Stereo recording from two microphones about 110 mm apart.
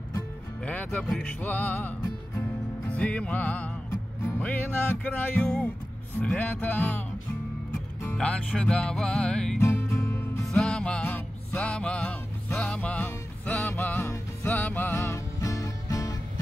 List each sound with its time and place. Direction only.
0.7 s music: 15° left (ahead or behind)
8.2 s music: 10° left (ahead or behind)
9.6 s music: 20° left (ahead or behind)
10.4 s music: 5° left (ahead or behind); by 16.2 s 30° left (ahead or behind)